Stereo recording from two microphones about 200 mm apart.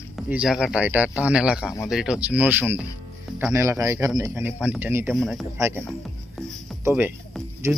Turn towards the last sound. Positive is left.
turn(degrees=-15)  # may be behind; listen again after turning